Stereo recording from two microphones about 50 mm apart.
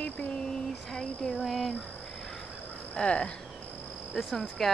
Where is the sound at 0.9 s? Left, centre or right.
Centre.